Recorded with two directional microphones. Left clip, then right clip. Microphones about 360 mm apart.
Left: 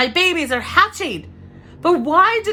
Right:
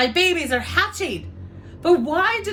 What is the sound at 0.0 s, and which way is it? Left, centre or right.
A woman's voice, left.